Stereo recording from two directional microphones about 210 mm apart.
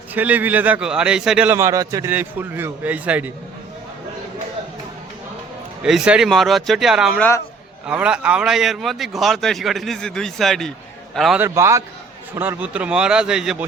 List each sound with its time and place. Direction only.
0.1 s a man's voice: 10° right (ahead or behind)
5.8 s a man's voice: 5° right (ahead or behind)
11.4 s a man's voice: 15° right (ahead or behind)